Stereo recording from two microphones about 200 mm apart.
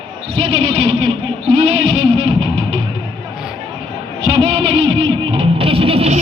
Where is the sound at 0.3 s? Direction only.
25° right (ahead or behind).